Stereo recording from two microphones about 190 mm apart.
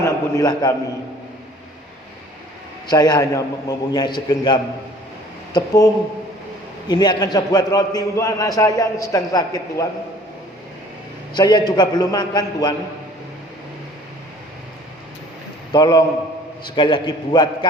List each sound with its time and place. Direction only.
0.0 s a man's voice: 20° left (ahead or behind)
2.8 s a man's voice: 20° left (ahead or behind)
11.3 s a man's voice: 20° left (ahead or behind)
15.7 s a man's voice: 20° left (ahead or behind)